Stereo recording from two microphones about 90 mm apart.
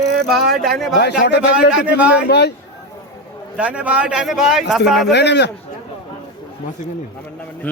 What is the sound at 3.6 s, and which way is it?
A man's voice, 15° right (ahead or behind).